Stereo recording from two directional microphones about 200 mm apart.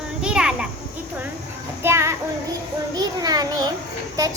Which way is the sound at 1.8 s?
15° right (ahead or behind).